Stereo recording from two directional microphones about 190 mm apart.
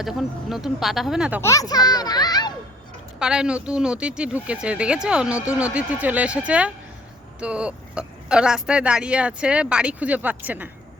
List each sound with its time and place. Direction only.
0.0 s speech: centre (ahead or behind)
1.4 s a child's voice: 15° left (ahead or behind)
3.2 s speech: 5° right (ahead or behind)